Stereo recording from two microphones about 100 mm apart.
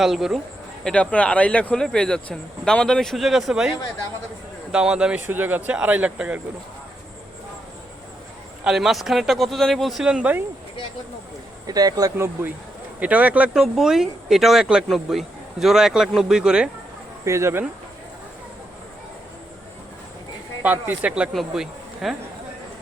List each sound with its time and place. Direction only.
0.0 s speech: 5° right (ahead or behind)
0.9 s speech: 10° left (ahead or behind); by 6.4 s 10° right (ahead or behind)
8.6 s speech: 5° right (ahead or behind)
11.6 s speech: 40° right (ahead or behind)
12.1 s speech: 25° right (ahead or behind)
13.6 s speech: 5° right (ahead or behind)
17.2 s speech: 25° right (ahead or behind)
20.6 s speech: 20° right (ahead or behind)
21.3 s speech: 5° right (ahead or behind)